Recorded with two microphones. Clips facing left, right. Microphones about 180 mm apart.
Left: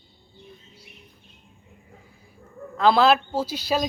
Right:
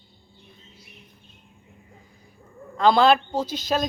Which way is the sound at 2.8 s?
5° left (ahead or behind).